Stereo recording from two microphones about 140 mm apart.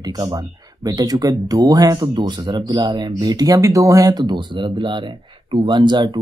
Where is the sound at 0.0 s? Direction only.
30° right (ahead or behind).